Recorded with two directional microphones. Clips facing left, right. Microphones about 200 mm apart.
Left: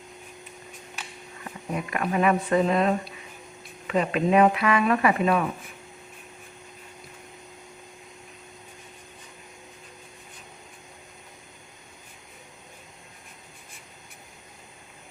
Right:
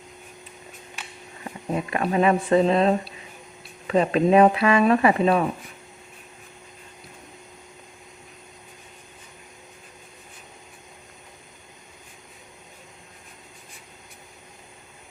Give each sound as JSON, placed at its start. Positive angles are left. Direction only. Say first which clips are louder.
{"t": 1.7, "sound": "speech", "louder": "right 3 dB", "side_deg": -30}